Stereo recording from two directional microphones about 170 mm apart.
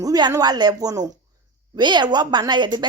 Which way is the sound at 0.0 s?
25° right (ahead or behind).